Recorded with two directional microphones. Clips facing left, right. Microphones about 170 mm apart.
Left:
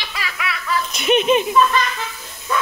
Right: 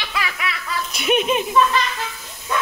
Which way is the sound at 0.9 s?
5° right (ahead or behind).